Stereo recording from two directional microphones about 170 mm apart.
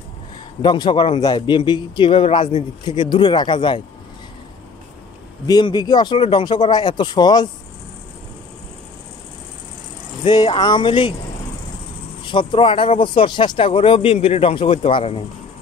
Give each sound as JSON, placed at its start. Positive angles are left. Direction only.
{"t": 0.6, "sound": "a man's voice", "side_deg": 25}
{"t": 5.5, "sound": "a man's voice", "side_deg": 25}
{"t": 10.2, "sound": "a man's voice", "side_deg": 30}
{"t": 12.3, "sound": "speech", "side_deg": 30}